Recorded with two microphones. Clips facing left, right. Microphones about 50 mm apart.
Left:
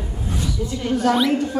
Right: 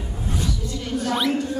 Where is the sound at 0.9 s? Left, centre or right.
Left.